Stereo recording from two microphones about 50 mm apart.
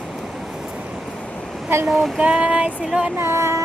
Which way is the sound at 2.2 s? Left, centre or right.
Right.